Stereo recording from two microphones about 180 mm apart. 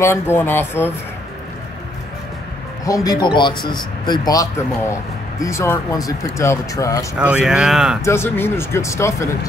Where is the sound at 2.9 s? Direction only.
20° left (ahead or behind).